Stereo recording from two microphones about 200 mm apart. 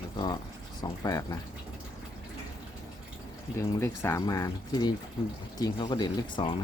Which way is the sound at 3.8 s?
15° left (ahead or behind).